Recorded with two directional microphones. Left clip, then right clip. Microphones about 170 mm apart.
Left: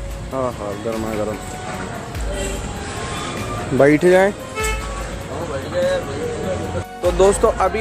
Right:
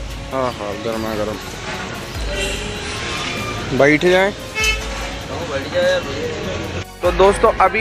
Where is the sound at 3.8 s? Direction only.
25° left (ahead or behind).